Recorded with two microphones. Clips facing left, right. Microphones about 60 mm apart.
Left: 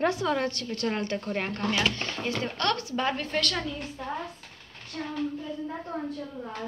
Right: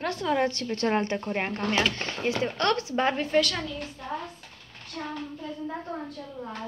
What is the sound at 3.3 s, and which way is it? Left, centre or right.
Speech, centre.